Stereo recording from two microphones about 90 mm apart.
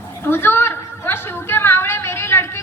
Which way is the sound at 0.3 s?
25° left (ahead or behind).